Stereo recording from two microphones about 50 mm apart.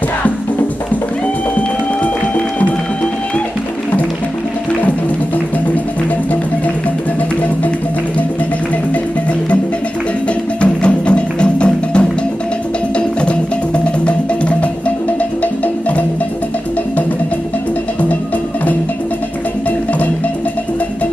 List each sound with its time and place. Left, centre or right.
10.6 s music: left
14.0 s music: left